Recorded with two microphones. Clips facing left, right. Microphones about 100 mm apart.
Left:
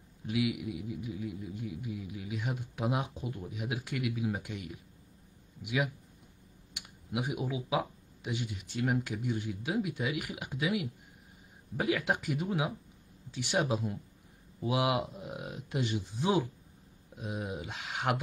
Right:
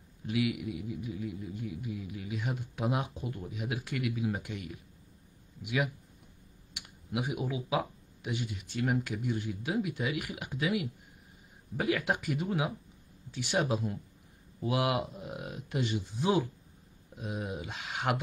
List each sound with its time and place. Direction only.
0.3 s speech: 5° left (ahead or behind)
4.1 s speech: centre (ahead or behind)
4.4 s speech: 15° left (ahead or behind)
7.1 s speech: 10° left (ahead or behind)
11.7 s speech: 10° left (ahead or behind)
17.2 s speech: 15° left (ahead or behind)